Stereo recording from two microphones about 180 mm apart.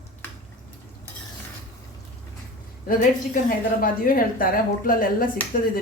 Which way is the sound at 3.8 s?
50° left (ahead or behind).